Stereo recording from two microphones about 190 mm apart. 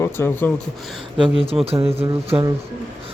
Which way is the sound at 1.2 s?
30° right (ahead or behind).